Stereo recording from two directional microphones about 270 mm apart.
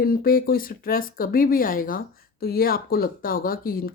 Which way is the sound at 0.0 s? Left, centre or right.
Left.